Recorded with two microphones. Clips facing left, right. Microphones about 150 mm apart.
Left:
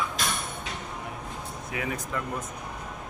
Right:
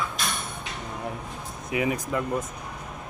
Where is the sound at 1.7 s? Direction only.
15° right (ahead or behind).